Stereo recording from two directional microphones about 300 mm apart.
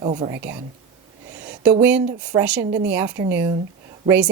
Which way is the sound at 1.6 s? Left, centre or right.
Centre.